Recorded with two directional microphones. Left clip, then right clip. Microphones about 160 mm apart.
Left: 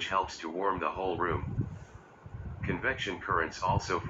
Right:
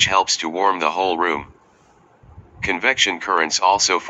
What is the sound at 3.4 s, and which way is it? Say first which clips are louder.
Speech: right 15 dB; 60° right (ahead or behind).